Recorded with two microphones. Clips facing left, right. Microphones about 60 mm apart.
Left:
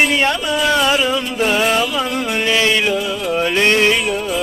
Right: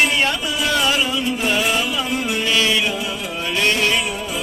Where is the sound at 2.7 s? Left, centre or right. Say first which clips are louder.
Left 4 dB; left.